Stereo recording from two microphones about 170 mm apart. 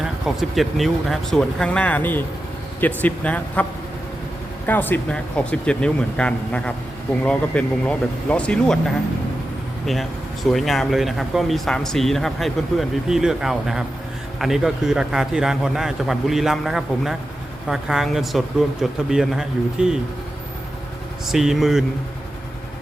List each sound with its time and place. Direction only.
0.0 s speech: centre (ahead or behind)
9.8 s speech: centre (ahead or behind)
21.2 s speech: centre (ahead or behind)